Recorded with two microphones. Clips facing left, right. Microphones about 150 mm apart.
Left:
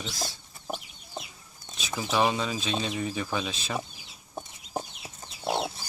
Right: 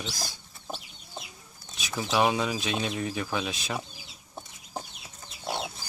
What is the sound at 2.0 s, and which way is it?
Speech, 5° right (ahead or behind).